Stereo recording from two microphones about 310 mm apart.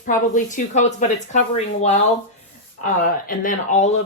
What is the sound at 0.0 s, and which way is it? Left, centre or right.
A woman's voice, left.